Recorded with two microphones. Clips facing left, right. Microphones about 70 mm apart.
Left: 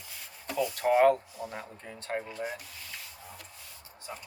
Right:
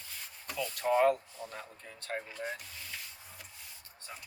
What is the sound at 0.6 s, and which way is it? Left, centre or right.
Speech, left.